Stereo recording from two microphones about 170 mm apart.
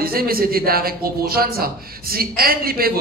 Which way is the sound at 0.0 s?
60° right (ahead or behind).